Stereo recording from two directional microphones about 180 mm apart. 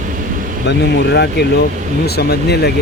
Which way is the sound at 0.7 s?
70° left (ahead or behind).